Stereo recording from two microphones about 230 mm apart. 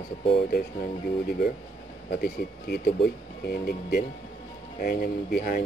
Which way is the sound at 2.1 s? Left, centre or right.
Left.